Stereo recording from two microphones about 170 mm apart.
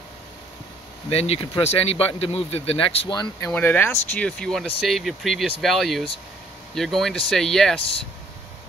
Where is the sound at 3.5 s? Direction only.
10° left (ahead or behind).